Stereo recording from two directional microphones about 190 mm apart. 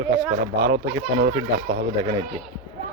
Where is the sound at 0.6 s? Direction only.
75° right (ahead or behind).